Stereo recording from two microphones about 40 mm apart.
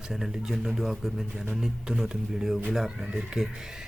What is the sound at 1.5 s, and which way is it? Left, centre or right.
Speech, centre.